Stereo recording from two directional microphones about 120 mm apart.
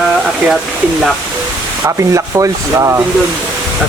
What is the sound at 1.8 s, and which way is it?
Speech, 25° right (ahead or behind).